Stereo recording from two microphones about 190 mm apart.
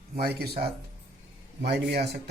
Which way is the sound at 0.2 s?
55° right (ahead or behind).